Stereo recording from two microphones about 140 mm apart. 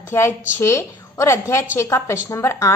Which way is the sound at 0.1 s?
20° left (ahead or behind).